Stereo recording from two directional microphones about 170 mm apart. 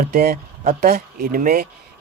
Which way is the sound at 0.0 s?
60° right (ahead or behind).